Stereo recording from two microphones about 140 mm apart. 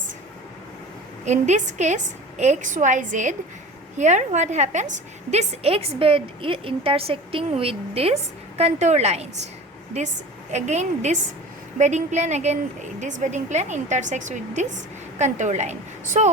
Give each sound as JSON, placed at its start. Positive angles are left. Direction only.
{"t": 1.2, "sound": "a woman's voice", "side_deg": -55}
{"t": 10.5, "sound": "a woman's voice", "side_deg": -55}